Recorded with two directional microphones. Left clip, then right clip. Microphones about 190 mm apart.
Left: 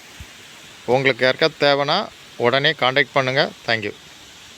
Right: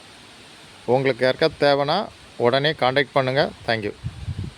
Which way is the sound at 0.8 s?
5° right (ahead or behind).